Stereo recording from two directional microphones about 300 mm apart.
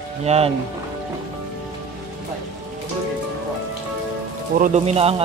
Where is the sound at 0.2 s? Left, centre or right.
Right.